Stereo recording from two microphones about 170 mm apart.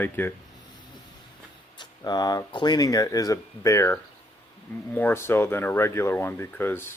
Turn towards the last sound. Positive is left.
turn(degrees=15)  # may be behind; listen again after turning